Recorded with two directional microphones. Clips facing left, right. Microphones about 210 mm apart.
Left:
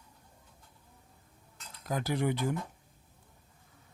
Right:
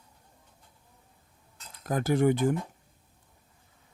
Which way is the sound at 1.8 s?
50° right (ahead or behind).